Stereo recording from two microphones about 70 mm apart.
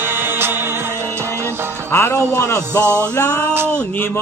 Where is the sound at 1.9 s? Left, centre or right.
Left.